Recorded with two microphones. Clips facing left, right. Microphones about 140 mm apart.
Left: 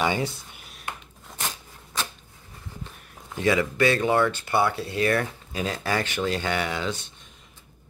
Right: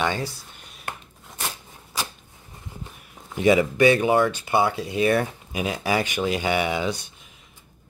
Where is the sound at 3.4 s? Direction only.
20° right (ahead or behind).